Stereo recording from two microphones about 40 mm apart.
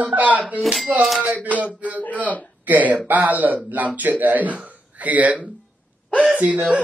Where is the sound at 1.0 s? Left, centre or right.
Centre.